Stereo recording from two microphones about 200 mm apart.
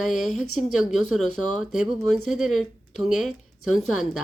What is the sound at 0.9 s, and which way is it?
Speech, centre (ahead or behind).